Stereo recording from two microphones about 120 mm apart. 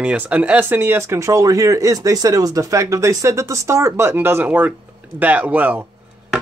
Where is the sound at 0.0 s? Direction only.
10° right (ahead or behind).